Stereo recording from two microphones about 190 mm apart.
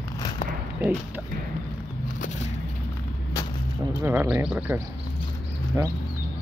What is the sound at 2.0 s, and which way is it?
Music, 40° left (ahead or behind).